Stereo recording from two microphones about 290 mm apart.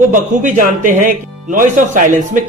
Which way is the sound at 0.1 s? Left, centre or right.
Right.